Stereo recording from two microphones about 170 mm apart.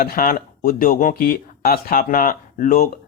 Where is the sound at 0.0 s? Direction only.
55° left (ahead or behind).